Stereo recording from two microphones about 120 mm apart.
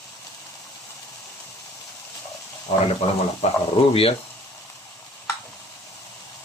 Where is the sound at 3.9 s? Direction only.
50° left (ahead or behind).